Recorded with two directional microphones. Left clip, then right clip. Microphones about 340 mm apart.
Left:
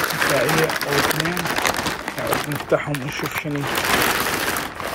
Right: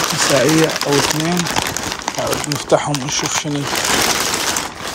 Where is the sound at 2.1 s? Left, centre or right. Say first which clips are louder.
Right 6 dB; centre.